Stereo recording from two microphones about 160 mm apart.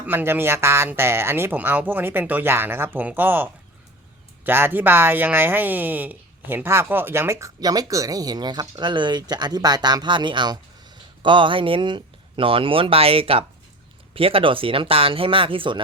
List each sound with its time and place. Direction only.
0.0 s speech: 10° right (ahead or behind); by 15.8 s 30° right (ahead or behind)